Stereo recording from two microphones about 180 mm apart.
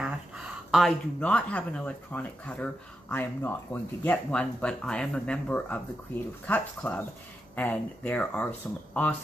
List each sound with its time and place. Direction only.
0.0 s speech: 5° right (ahead or behind)